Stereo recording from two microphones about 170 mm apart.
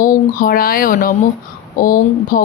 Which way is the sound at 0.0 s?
55° left (ahead or behind).